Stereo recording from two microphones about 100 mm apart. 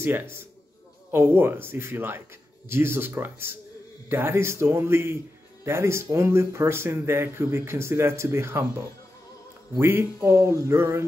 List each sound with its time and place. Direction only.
0.0 s speech: 20° right (ahead or behind)